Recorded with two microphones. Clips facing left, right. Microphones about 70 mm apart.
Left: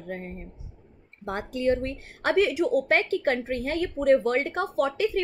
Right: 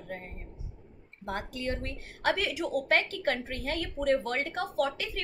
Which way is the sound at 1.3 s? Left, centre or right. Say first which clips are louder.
Left 8 dB; left.